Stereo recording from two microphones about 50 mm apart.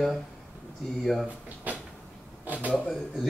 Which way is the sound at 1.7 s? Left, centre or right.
Right.